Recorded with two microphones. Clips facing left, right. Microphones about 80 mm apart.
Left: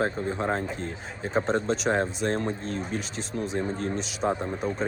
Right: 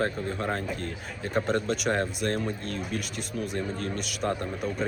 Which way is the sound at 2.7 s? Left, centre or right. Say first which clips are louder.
Left 1 dB; left.